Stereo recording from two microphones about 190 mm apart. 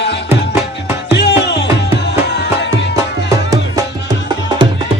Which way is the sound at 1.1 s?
65° left (ahead or behind).